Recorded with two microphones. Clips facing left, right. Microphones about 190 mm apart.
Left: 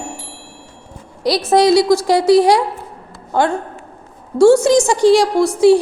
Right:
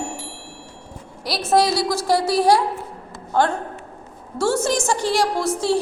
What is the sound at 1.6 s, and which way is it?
Speech, 15° left (ahead or behind).